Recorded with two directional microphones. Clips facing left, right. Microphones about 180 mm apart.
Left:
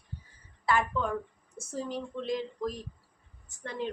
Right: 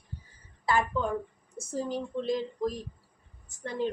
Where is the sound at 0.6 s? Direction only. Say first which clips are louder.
Right 1 dB; 35° right (ahead or behind).